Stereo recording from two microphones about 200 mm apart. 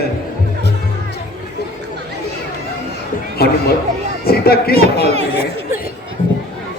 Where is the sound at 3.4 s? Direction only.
50° left (ahead or behind).